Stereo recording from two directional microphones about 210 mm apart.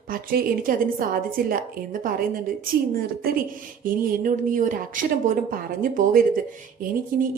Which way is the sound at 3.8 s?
40° right (ahead or behind).